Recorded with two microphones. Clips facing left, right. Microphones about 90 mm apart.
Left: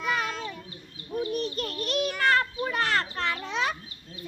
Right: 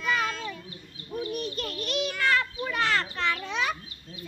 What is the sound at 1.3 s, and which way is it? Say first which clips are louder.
Children playing: left 2 dB; 35° left (ahead or behind).